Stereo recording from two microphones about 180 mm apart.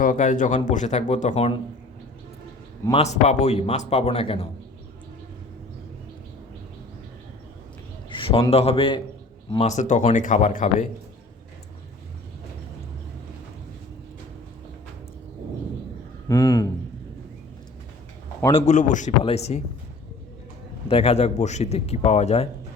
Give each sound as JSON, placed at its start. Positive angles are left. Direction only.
{"t": 0.0, "sound": "speech", "side_deg": 45}
{"t": 2.9, "sound": "speech", "side_deg": 40}
{"t": 8.1, "sound": "a man's voice", "side_deg": 30}
{"t": 16.3, "sound": "a man's voice", "side_deg": 20}
{"t": 18.6, "sound": "speech", "side_deg": 40}
{"t": 20.8, "sound": "speech", "side_deg": 35}